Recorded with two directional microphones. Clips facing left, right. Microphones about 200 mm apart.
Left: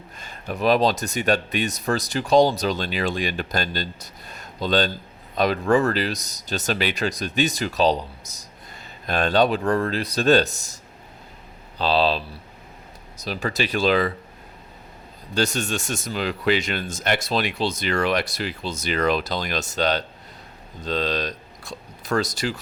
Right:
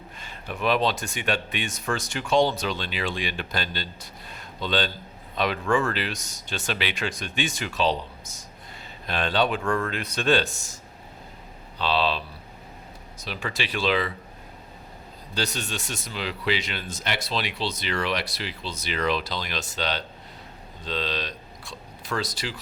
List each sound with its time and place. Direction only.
0.2 s speech: 40° left (ahead or behind)
11.8 s speech: 40° left (ahead or behind)
15.4 s speech: 45° left (ahead or behind)